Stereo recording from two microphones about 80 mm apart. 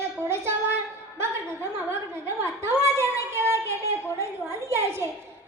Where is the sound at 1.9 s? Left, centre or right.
Right.